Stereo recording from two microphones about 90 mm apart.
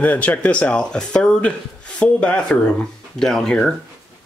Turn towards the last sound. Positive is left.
turn(degrees=5)  # may be behind; listen again after turning